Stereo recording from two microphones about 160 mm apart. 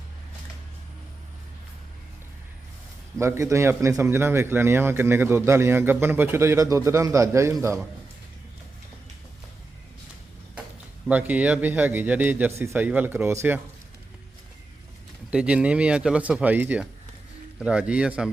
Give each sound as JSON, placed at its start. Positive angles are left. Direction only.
{"t": 3.2, "sound": "a man's voice", "side_deg": -20}
{"t": 11.1, "sound": "a man's voice", "side_deg": -10}
{"t": 15.3, "sound": "a man's voice", "side_deg": -5}